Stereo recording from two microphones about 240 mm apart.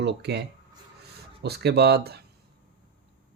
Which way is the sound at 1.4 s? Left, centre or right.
Right.